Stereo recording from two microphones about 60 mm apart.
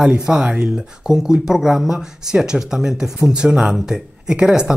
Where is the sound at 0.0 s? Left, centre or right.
Centre.